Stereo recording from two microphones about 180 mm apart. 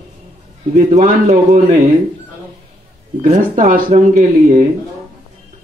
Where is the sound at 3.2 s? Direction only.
50° right (ahead or behind).